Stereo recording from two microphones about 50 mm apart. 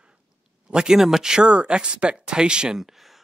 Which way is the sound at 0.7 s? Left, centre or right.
Centre.